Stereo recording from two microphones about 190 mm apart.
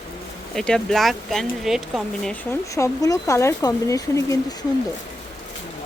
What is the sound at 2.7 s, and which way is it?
Speech, 15° left (ahead or behind).